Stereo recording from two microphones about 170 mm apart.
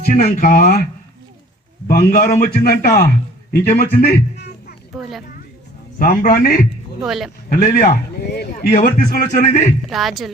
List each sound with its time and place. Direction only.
0.1 s a man's voice: 55° left (ahead or behind)
1.9 s a man's voice: 60° left (ahead or behind)
6.0 s a man's voice: 50° left (ahead or behind)
7.0 s speech: centre (ahead or behind)
7.5 s a man's voice: 55° left (ahead or behind)
8.3 s a man's voice: 65° left (ahead or behind); by 9.7 s 45° left (ahead or behind)
9.8 s speech: centre (ahead or behind)